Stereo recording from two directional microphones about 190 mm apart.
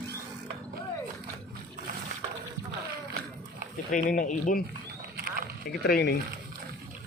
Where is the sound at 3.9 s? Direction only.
45° left (ahead or behind).